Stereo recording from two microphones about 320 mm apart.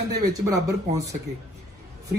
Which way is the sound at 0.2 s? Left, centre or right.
Centre.